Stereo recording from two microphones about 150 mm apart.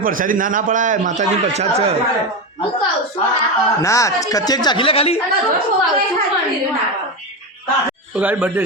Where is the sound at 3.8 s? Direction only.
20° left (ahead or behind); by 5.2 s 40° left (ahead or behind).